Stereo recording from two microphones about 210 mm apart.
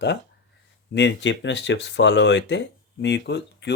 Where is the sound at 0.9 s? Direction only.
55° left (ahead or behind).